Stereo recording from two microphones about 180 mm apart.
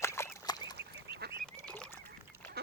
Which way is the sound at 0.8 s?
70° right (ahead or behind).